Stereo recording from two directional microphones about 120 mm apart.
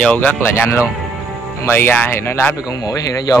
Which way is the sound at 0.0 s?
10° left (ahead or behind).